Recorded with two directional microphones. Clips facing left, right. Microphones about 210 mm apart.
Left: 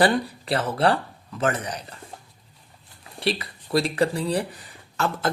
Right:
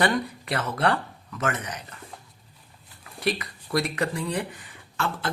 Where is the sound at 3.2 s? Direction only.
30° left (ahead or behind).